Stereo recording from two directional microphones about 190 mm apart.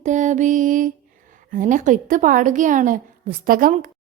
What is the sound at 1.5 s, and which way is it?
A woman's voice, 45° right (ahead or behind).